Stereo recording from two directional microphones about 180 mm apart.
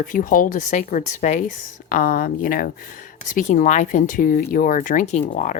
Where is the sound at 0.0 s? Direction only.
45° left (ahead or behind).